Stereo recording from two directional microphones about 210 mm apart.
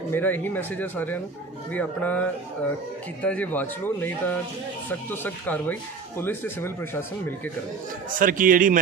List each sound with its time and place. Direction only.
0.1 s speech: 10° left (ahead or behind)
3.2 s speech: 5° left (ahead or behind)
8.2 s a man's voice: 40° right (ahead or behind)